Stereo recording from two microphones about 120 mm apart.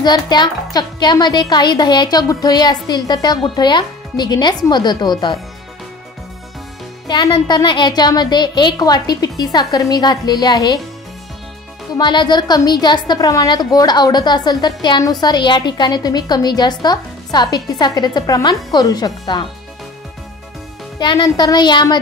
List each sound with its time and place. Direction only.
0.0 s a woman's voice: 35° left (ahead or behind)
7.2 s a woman's voice: 40° left (ahead or behind)
11.9 s a woman's voice: 40° left (ahead or behind)
21.0 s a woman's voice: 40° left (ahead or behind)